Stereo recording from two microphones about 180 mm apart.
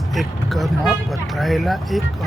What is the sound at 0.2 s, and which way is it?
Speech, centre (ahead or behind).